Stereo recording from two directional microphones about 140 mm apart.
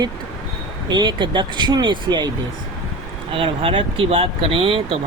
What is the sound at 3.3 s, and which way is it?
Speech, 40° right (ahead or behind).